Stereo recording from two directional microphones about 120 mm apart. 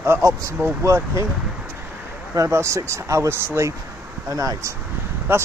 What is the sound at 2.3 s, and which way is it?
Speech, 25° right (ahead or behind).